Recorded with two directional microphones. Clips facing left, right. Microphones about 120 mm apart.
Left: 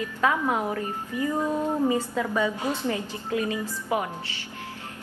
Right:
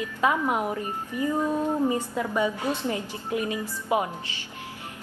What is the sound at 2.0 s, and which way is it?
Speech, 15° right (ahead or behind).